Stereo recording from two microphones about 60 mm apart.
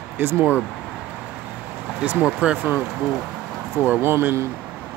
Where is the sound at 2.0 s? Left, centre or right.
Right.